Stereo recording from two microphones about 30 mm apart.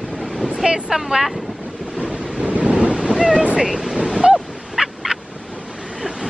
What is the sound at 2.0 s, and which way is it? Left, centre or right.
Waves, right.